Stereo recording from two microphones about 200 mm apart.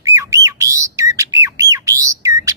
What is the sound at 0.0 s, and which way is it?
Squawk, 15° right (ahead or behind).